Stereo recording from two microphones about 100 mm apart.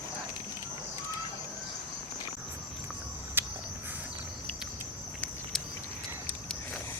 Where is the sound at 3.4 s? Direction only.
20° right (ahead or behind).